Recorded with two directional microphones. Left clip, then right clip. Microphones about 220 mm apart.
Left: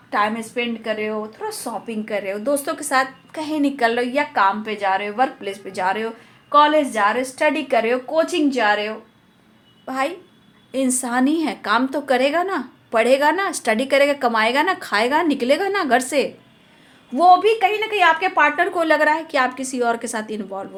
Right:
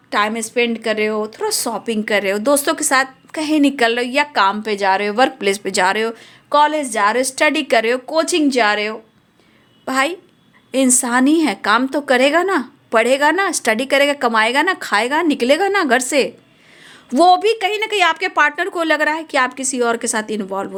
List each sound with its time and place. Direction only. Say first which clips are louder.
0.1 s a woman's voice: right 3 dB; 55° right (ahead or behind)
9.8 s a child's voice: right 5 dB; 45° right (ahead or behind)
17.2 s speech: right 1 dB; 55° right (ahead or behind); by 20.7 s 35° right (ahead or behind)